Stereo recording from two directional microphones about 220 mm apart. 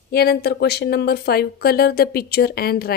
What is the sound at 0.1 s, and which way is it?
Speech, 45° left (ahead or behind).